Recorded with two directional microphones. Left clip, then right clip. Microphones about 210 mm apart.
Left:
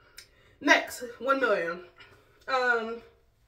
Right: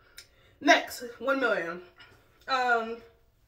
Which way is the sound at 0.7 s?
5° right (ahead or behind).